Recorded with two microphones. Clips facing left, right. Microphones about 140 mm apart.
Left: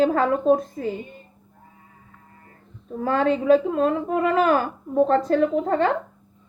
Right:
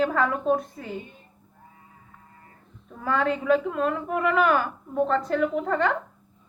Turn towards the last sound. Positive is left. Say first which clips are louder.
# left 4 dB
turn(degrees=30)  # may be behind; listen again after turning